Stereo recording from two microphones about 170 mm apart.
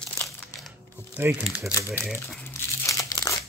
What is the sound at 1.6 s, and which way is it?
Speech, 15° left (ahead or behind).